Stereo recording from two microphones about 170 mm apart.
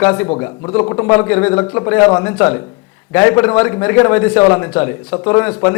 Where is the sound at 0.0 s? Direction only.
10° left (ahead or behind).